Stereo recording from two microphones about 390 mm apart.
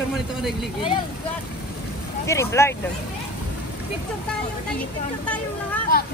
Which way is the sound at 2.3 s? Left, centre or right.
Centre.